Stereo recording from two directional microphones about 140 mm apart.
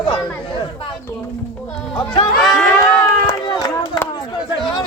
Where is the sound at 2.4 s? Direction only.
Centre (ahead or behind).